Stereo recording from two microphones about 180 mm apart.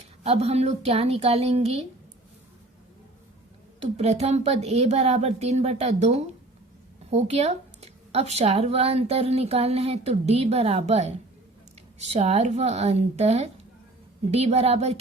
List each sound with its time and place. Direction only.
0.2 s speech: 35° right (ahead or behind)
3.8 s speech: 35° right (ahead or behind)